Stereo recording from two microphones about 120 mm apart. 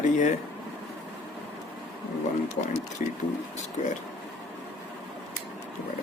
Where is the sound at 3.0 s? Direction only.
90° left.